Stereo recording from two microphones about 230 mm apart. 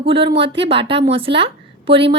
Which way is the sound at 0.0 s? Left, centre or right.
Right.